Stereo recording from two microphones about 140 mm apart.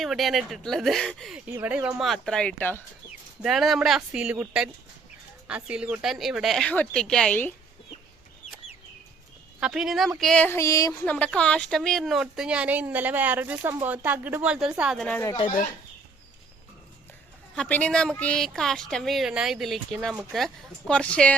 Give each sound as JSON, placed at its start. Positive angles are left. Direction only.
{"t": 0.0, "sound": "speech", "side_deg": 0}
{"t": 1.5, "sound": "speech", "side_deg": -15}
{"t": 2.0, "sound": "speech", "side_deg": 5}
{"t": 3.4, "sound": "speech", "side_deg": 0}
{"t": 9.6, "sound": "speech", "side_deg": -5}
{"t": 10.2, "sound": "a sound", "side_deg": 5}
{"t": 11.0, "sound": "speech", "side_deg": 10}
{"t": 14.9, "sound": "a sound", "side_deg": 5}
{"t": 17.5, "sound": "speech", "side_deg": 10}